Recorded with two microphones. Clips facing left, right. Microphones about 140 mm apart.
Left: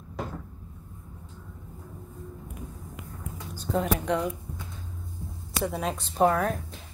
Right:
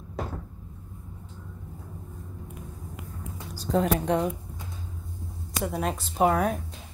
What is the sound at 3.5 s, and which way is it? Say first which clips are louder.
Speech: right 3 dB; 35° right (ahead or behind).